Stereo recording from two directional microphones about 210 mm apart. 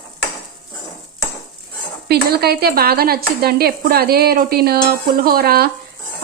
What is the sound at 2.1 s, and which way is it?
Speech, 50° right (ahead or behind).